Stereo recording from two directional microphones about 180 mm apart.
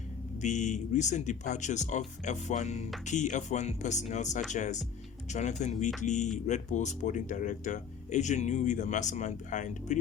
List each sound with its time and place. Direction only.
0.4 s speech: 40° left (ahead or behind)